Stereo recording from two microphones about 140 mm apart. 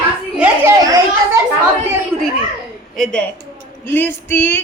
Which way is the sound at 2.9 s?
5° left (ahead or behind).